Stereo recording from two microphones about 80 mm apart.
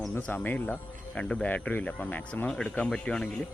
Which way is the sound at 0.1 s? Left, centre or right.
Left.